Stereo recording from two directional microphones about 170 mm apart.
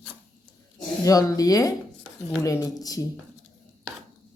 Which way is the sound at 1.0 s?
20° left (ahead or behind).